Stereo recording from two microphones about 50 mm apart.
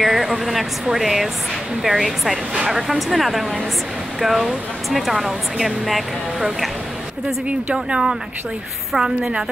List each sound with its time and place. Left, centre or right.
0.0 s speech: centre
7.4 s a woman's voice: right